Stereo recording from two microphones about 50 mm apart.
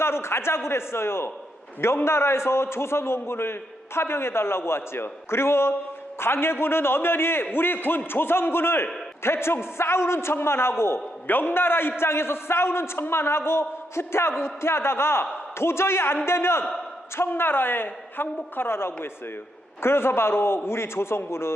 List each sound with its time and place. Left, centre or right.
0.0 s a man's voice: left
11.3 s a man's voice: left